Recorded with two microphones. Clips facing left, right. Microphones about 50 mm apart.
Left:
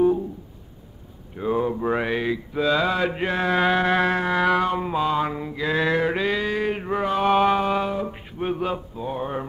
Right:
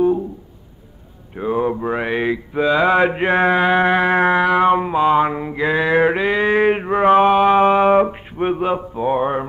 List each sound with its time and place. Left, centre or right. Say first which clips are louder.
1.4 s a sound: right 4 dB; right
1.9 s speech: right 2 dB; centre
2.1 s mantra: right 5 dB; right
3.5 s music: right 5 dB; right
4.6 s mantra: right 8 dB; right
6.5 s mantra: right 9 dB; right
7.2 s music: right 5 dB; centre
7.5 s music: right 10 dB; right